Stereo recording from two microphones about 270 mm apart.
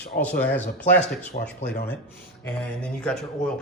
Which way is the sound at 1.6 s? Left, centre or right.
Left.